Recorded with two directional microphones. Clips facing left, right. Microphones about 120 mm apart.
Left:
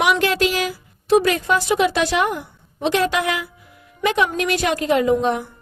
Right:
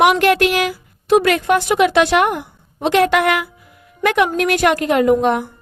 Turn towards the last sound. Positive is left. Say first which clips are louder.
# right 3 dB
turn(degrees=-60)  # may be behind; listen again after turning